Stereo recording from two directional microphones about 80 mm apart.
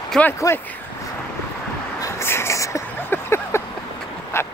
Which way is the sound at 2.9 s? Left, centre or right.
Left.